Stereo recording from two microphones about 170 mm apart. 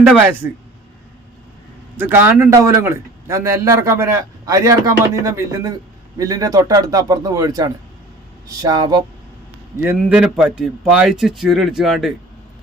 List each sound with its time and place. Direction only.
0.3 s a man's voice: 10° right (ahead or behind)
2.0 s a man's voice: 10° right (ahead or behind)
9.7 s a man's voice: 15° right (ahead or behind)